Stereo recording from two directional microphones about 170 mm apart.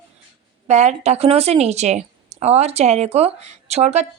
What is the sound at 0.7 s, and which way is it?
A woman's voice, 40° right (ahead or behind).